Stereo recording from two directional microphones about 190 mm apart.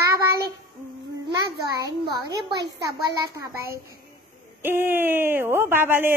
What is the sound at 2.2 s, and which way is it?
A child's voice, 20° right (ahead or behind).